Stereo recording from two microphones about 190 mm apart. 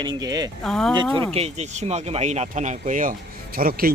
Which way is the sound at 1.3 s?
35° right (ahead or behind).